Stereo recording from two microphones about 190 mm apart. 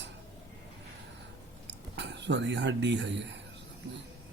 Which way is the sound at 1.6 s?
65° right (ahead or behind).